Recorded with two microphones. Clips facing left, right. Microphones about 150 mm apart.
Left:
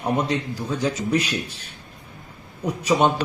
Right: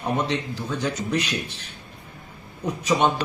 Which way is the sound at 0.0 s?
10° left (ahead or behind).